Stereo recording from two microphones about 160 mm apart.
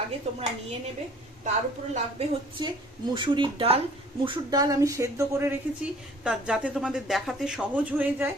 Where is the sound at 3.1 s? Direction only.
30° right (ahead or behind).